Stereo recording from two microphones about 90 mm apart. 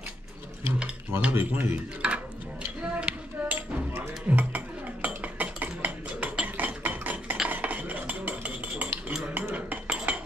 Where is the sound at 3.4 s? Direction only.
10° right (ahead or behind).